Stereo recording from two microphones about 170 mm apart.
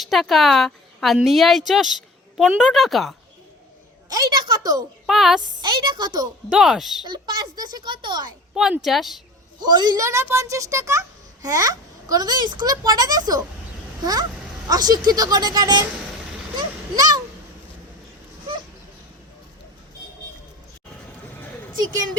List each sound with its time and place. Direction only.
0.0 s a woman's voice: centre (ahead or behind)
4.1 s a child's voice: 20° right (ahead or behind)
5.0 s a woman's voice: centre (ahead or behind)
5.6 s a child's voice: 25° right (ahead or behind)
6.5 s a woman's voice: centre (ahead or behind)
7.1 s a child's voice: 25° right (ahead or behind)
8.5 s a woman's voice: 5° right (ahead or behind)
9.6 s a woman's voice: 25° right (ahead or behind)
16.6 s a sound: 25° right (ahead or behind)